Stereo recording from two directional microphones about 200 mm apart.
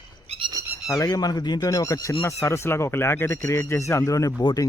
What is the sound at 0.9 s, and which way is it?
Speech, 15° left (ahead or behind).